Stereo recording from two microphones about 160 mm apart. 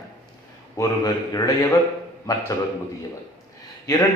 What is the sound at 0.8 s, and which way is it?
A man's voice, 20° left (ahead or behind).